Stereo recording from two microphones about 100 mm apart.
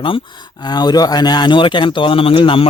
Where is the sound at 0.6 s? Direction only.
45° left (ahead or behind).